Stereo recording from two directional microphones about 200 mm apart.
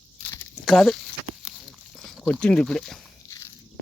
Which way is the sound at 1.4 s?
Centre (ahead or behind).